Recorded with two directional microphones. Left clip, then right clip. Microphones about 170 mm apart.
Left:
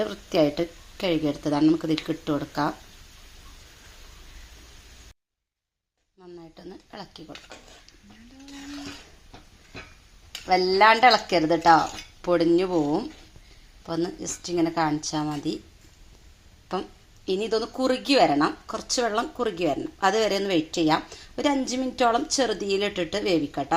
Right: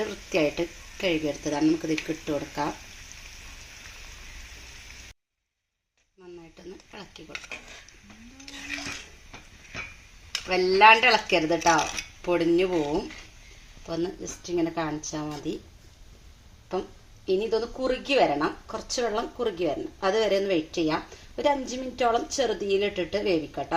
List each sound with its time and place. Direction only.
0.3 s a woman's voice: 45° left (ahead or behind)
6.9 s speech: 40° left (ahead or behind)
10.5 s a woman's voice: 45° left (ahead or behind)
13.8 s a woman's voice: 45° left (ahead or behind)
17.2 s a woman's voice: 55° left (ahead or behind)